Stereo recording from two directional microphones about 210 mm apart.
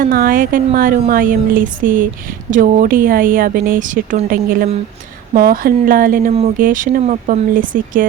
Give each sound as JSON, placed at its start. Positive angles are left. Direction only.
{"t": 0.0, "sound": "a woman's voice", "side_deg": -40}